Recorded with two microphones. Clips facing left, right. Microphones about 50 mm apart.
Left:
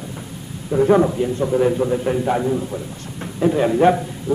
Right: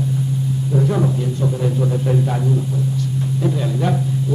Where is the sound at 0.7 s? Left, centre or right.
Left.